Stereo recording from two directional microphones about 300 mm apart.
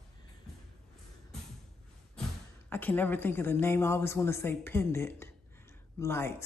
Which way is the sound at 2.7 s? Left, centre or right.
Centre.